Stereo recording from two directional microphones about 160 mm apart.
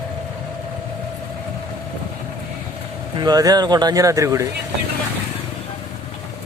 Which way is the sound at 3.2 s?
25° right (ahead or behind).